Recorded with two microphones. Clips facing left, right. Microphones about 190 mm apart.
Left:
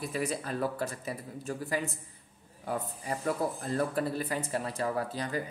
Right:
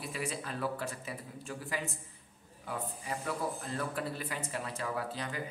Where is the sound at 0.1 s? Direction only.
40° left (ahead or behind).